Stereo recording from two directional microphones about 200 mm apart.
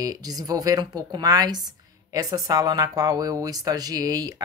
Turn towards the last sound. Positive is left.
turn(degrees=-20)  # may be behind; listen again after turning